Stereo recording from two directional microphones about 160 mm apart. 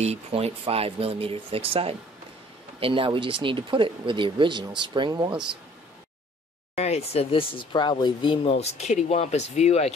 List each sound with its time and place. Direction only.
0.0 s speech: 40° right (ahead or behind)
6.7 s speech: 40° left (ahead or behind)